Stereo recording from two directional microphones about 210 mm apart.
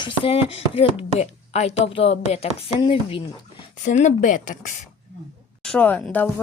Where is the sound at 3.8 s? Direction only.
35° left (ahead or behind).